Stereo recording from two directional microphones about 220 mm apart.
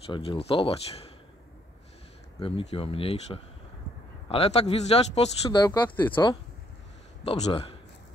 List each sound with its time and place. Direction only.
0.0 s speech: 25° left (ahead or behind)
2.7 s speech: 25° left (ahead or behind)